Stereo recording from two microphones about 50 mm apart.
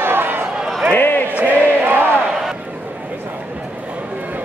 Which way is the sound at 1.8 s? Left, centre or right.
Right.